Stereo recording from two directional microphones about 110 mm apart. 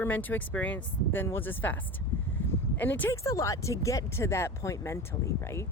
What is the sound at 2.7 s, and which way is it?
Speech, 15° left (ahead or behind).